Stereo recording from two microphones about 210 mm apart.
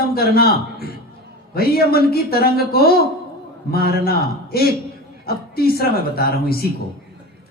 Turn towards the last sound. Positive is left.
turn(degrees=45)  # may be behind; listen again after turning